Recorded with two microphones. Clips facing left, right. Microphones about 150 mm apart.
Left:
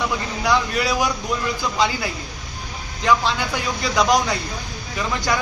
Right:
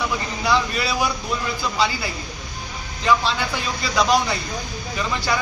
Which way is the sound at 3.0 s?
15° left (ahead or behind).